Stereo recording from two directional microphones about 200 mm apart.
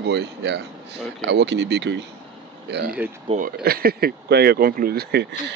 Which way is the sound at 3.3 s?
45° right (ahead or behind).